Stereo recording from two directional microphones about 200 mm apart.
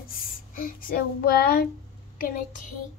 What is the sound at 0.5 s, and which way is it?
Speech, 45° left (ahead or behind).